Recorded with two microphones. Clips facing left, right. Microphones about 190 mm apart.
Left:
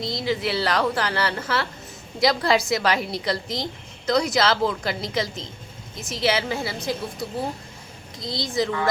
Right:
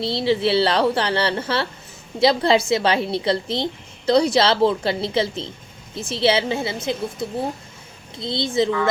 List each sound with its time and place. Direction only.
0.0 s a woman's voice: 30° right (ahead or behind)